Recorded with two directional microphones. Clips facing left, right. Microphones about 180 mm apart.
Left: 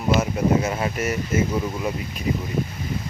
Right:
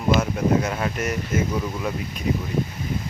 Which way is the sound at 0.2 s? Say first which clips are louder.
Even; 5° left (ahead or behind).